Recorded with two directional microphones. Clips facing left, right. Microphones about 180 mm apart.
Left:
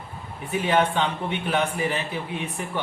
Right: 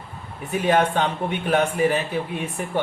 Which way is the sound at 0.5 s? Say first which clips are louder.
Right 2 dB; 45° right (ahead or behind).